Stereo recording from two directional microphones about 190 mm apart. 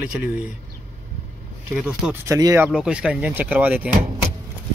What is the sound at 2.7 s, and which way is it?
Speech, 5° right (ahead or behind).